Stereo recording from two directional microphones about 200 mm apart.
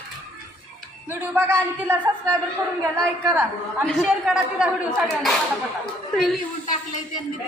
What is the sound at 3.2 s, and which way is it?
Speech, 10° right (ahead or behind).